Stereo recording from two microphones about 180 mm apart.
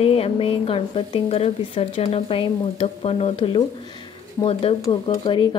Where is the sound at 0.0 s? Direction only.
30° left (ahead or behind).